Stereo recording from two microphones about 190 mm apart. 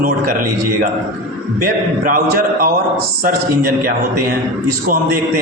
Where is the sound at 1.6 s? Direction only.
50° right (ahead or behind).